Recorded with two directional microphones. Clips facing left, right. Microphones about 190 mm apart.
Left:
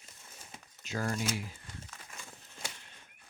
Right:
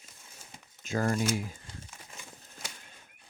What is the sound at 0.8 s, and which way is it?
Shuffling cards, 50° right (ahead or behind).